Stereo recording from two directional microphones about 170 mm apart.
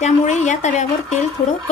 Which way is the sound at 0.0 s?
45° left (ahead or behind).